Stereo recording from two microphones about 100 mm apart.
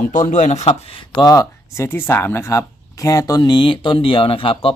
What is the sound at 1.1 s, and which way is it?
Speech, 40° left (ahead or behind).